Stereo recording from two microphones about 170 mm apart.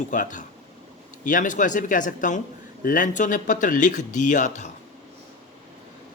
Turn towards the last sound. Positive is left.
turn(degrees=45)  # may be behind; listen again after turning